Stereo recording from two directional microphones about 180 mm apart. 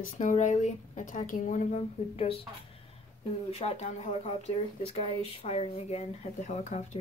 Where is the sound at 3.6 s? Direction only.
35° left (ahead or behind).